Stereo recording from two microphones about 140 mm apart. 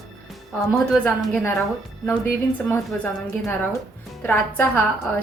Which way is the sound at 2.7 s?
15° left (ahead or behind).